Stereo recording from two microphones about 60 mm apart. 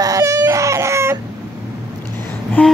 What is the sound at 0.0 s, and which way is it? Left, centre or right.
Baby cry, right.